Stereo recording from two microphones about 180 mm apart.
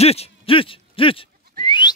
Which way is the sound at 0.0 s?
35° left (ahead or behind).